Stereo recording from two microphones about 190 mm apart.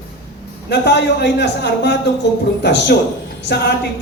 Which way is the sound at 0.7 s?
65° left (ahead or behind).